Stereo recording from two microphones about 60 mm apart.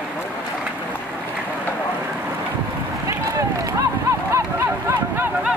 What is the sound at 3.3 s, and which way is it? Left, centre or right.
Run, right.